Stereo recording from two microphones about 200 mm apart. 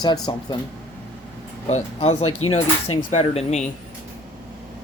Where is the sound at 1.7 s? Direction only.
30° left (ahead or behind).